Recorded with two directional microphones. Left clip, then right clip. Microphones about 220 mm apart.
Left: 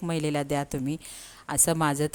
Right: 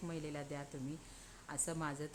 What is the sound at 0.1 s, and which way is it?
Speech, 45° left (ahead or behind).